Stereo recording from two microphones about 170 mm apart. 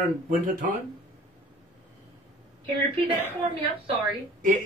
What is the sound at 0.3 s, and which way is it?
Speech, 55° right (ahead or behind).